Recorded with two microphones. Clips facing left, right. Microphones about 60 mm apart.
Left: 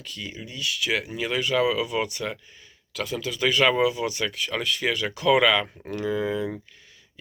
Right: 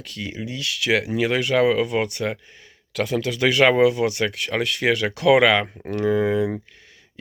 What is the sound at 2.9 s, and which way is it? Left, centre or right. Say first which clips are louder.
Speech: right 6 dB; right.